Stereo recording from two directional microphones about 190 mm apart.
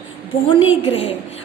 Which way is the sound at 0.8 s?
30° left (ahead or behind).